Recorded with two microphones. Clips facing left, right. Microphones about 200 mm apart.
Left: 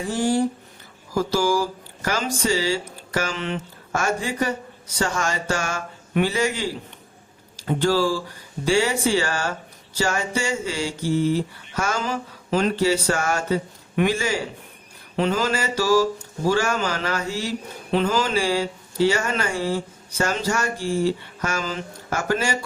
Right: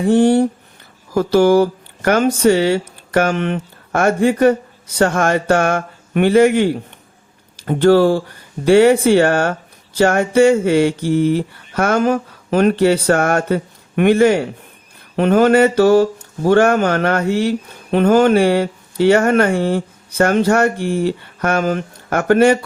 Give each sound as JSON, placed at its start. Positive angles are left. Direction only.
{"t": 0.0, "sound": "speech", "side_deg": -60}